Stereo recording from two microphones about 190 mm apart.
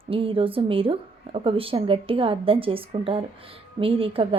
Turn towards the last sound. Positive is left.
turn(degrees=-30)  # may be behind; listen again after turning